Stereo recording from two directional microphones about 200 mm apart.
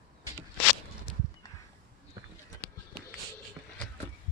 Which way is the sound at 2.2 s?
20° right (ahead or behind).